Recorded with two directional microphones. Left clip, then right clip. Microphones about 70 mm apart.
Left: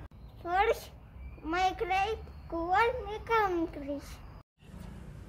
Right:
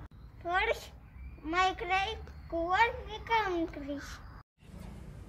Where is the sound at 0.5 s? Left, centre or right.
Left.